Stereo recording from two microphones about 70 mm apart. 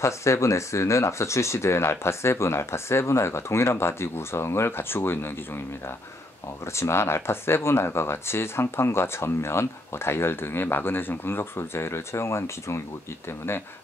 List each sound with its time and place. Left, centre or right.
0.0 s speech: left
6.6 s speech: left